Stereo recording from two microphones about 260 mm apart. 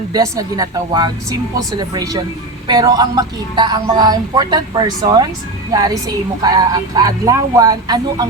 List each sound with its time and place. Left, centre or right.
0.1 s speech: centre